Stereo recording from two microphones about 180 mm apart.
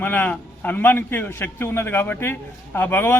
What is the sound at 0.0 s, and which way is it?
Speech, 10° left (ahead or behind).